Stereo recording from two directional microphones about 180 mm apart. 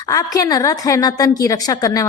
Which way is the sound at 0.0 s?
20° left (ahead or behind).